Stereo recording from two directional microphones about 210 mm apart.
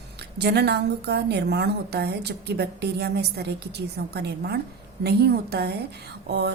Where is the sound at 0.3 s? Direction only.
50° right (ahead or behind).